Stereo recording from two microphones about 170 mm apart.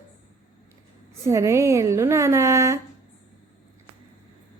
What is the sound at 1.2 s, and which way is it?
A woman's voice, 15° right (ahead or behind).